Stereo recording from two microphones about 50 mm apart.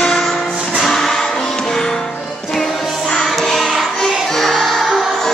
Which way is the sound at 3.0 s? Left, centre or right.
Centre.